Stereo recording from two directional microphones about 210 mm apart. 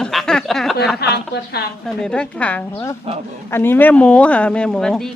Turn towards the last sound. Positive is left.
turn(degrees=0)  # may be behind; listen again after turning